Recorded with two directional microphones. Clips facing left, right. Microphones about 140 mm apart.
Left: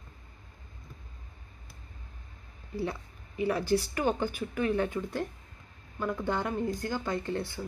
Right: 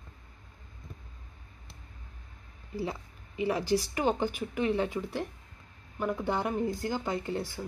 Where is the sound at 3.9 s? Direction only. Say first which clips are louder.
Right 1 dB; 15° right (ahead or behind).